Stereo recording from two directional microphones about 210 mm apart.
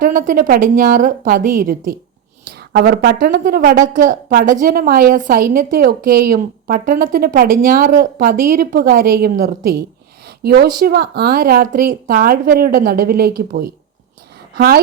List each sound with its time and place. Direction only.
0.0 s a woman's voice: 40° right (ahead or behind)